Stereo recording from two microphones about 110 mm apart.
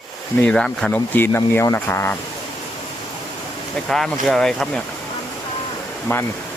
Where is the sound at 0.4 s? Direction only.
5° left (ahead or behind).